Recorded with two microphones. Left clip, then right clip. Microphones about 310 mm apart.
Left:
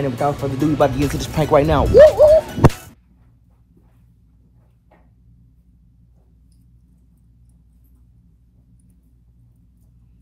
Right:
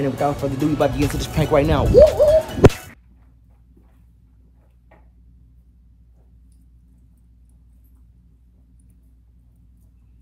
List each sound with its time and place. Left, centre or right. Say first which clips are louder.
0.0 s speech: left 1 dB; centre